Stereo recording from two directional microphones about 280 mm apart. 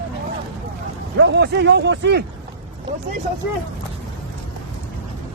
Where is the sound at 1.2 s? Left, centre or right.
Right.